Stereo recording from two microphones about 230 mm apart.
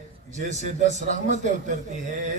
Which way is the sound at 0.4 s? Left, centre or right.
Right.